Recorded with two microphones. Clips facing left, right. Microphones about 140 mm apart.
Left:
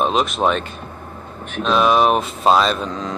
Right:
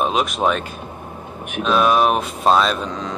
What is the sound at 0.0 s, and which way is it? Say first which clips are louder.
Speech: left 1 dB; 5° right (ahead or behind).